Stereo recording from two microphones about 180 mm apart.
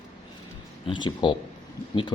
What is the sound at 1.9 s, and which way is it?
Speech, 30° left (ahead or behind).